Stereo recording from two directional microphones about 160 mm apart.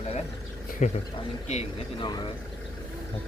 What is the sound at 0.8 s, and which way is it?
Speech, 50° left (ahead or behind).